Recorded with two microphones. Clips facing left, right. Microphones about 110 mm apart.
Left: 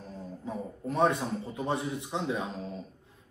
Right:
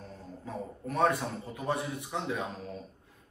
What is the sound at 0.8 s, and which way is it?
A man's voice, 25° left (ahead or behind).